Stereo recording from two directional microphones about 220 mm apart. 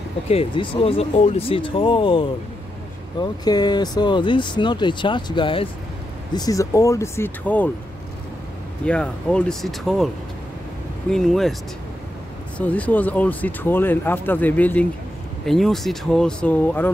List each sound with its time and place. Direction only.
0.3 s speech: 25° left (ahead or behind); by 7.7 s 10° left (ahead or behind)
8.8 s speech: 5° left (ahead or behind)
12.5 s speech: 5° left (ahead or behind)